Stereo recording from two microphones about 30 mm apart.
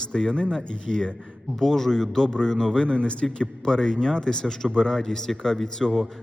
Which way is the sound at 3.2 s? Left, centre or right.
Left.